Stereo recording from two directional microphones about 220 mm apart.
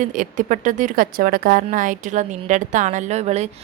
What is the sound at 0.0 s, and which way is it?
A woman's voice, 35° right (ahead or behind).